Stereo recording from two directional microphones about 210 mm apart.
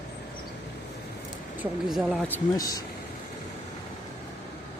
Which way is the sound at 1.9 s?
Centre (ahead or behind).